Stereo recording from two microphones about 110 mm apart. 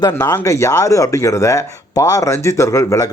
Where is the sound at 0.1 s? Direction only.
35° left (ahead or behind).